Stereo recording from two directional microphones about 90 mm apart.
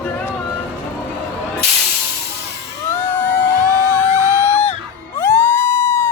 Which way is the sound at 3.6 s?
40° right (ahead or behind).